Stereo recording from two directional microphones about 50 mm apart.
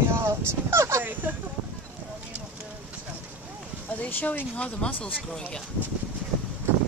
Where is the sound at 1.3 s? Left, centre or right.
Right.